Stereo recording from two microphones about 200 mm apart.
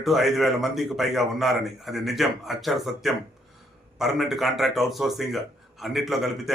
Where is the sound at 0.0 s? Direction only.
Centre (ahead or behind).